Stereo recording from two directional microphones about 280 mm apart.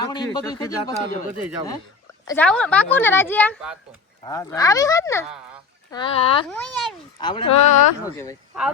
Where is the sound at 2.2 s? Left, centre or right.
Centre.